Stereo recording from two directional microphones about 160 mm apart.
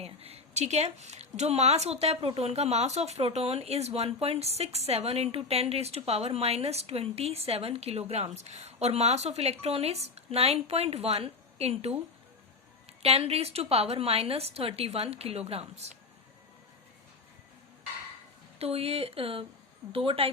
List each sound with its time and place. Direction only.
0.0 s a woman's voice: 40° right (ahead or behind)
13.0 s a woman's voice: 40° right (ahead or behind)
18.6 s a woman's voice: 40° right (ahead or behind)